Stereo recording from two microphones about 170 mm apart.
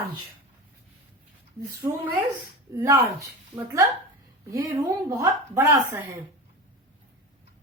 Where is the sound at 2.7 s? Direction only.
20° right (ahead or behind).